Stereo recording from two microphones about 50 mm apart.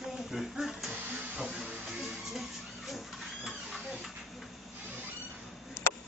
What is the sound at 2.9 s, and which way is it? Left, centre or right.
Printer, centre.